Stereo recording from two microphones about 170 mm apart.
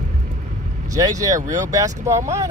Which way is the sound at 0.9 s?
20° right (ahead or behind).